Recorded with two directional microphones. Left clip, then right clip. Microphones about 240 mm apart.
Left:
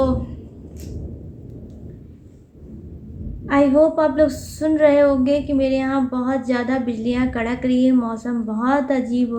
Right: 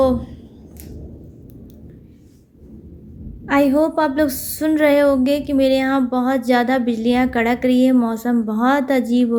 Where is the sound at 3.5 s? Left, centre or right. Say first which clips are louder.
Left 1 dB; right.